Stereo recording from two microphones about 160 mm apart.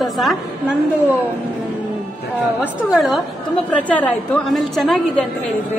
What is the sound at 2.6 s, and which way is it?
A woman's voice, 5° right (ahead or behind).